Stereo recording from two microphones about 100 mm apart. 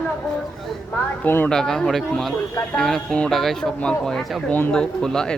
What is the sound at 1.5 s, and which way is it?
Speech, 5° left (ahead or behind).